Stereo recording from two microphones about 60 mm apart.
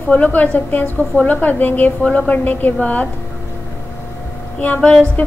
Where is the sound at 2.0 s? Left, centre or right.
Centre.